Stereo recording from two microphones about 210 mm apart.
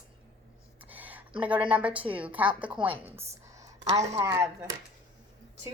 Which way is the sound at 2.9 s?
10° right (ahead or behind).